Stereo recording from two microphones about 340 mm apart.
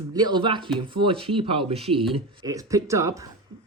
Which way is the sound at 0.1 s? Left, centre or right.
Centre.